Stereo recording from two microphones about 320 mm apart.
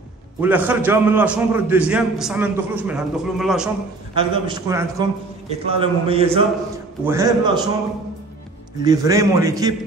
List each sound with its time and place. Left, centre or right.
0.4 s a man's voice: centre
4.1 s a man's voice: centre
8.8 s a man's voice: centre